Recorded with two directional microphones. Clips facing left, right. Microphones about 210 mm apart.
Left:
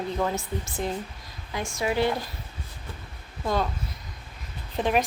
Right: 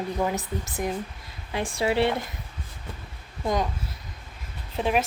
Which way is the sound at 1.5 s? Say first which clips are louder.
Right 2 dB; 35° right (ahead or behind).